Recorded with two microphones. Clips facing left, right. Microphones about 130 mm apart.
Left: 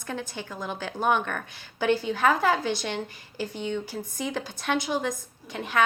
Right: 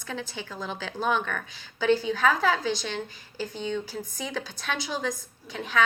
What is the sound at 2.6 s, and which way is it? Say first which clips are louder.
Speech: left 1 dB; 60° left (ahead or behind).